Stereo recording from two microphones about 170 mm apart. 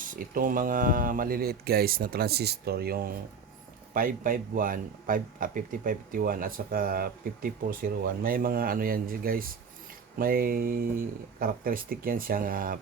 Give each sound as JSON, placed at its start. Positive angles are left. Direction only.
{"t": 0.0, "sound": "speech", "side_deg": -55}